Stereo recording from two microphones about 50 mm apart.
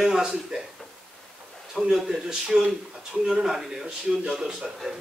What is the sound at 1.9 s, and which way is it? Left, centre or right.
A man's voice, centre.